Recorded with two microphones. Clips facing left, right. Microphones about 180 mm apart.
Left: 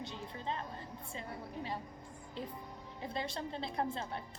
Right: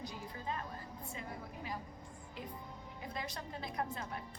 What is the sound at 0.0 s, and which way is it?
Speech, 25° left (ahead or behind).